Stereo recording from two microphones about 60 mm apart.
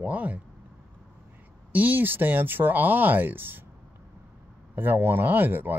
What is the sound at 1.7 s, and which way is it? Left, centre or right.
Speech, right.